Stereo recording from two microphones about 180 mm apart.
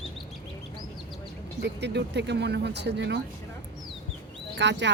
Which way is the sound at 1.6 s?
70° right (ahead or behind).